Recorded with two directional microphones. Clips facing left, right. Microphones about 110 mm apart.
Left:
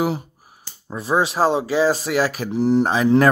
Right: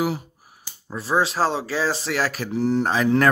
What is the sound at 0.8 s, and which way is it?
Speech, 15° left (ahead or behind).